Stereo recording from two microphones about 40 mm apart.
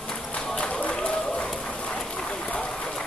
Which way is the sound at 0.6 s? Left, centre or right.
Left.